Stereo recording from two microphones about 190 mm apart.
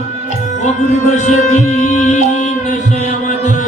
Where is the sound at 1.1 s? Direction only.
40° left (ahead or behind).